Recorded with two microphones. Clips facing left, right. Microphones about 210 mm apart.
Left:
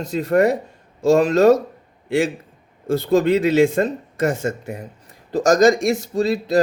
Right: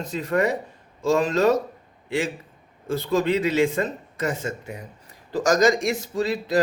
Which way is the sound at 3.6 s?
45° left (ahead or behind).